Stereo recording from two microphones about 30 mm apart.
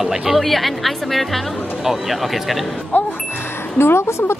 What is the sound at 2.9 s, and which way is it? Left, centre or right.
Music, left.